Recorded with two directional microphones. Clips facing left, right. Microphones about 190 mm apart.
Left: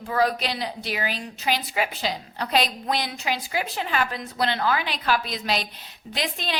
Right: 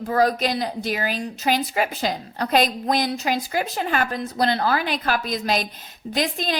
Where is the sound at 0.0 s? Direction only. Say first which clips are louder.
Right 4 dB; 40° right (ahead or behind).